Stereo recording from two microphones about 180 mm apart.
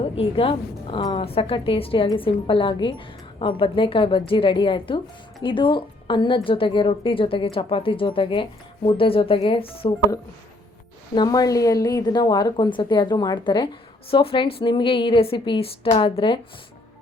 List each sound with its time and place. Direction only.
0.0 s a woman's voice: 30° left (ahead or behind)
11.1 s a woman's voice: 25° left (ahead or behind)